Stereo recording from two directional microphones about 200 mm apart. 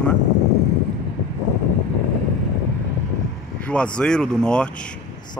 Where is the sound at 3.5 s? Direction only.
5° left (ahead or behind).